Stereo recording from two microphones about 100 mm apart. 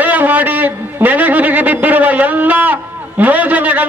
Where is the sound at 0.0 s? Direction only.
20° right (ahead or behind).